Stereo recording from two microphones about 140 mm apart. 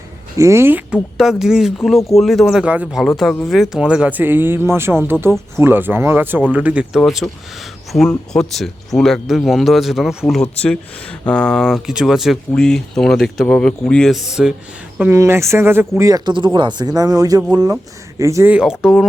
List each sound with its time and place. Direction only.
0.3 s speech: 20° right (ahead or behind)
1.2 s speech: 5° right (ahead or behind)
15.1 s speech: 20° right (ahead or behind)
18.5 s speech: 5° right (ahead or behind)